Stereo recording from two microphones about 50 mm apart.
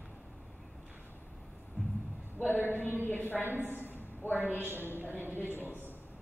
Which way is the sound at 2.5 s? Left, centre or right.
Left.